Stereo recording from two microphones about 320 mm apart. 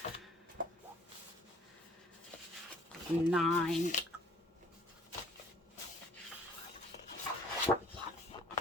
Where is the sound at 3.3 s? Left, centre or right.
Centre.